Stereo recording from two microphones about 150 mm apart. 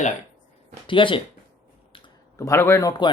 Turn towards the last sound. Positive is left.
turn(degrees=25)  # may be behind; listen again after turning